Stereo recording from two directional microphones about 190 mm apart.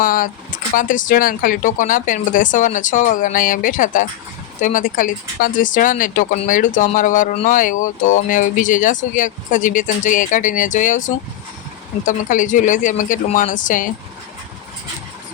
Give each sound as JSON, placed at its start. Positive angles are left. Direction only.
{"t": 0.0, "sound": "speech", "side_deg": 45}